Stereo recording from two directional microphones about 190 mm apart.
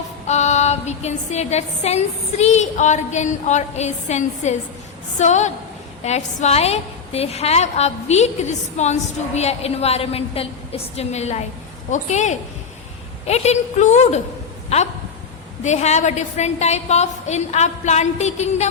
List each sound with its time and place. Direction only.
0.3 s a woman's voice: 35° left (ahead or behind)